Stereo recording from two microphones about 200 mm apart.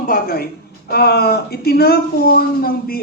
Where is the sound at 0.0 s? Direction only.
45° left (ahead or behind).